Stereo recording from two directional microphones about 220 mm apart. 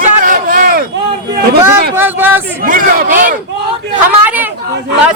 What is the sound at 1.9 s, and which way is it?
Speech, 10° right (ahead or behind).